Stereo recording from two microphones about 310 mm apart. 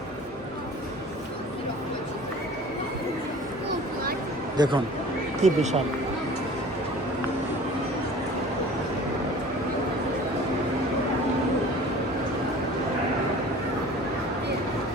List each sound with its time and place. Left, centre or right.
4.5 s speech: centre